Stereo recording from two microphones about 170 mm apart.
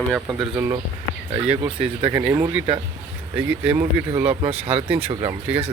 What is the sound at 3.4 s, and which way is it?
Speech, 10° right (ahead or behind).